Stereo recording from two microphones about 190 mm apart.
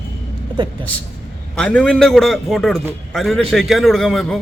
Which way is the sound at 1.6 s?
5° left (ahead or behind).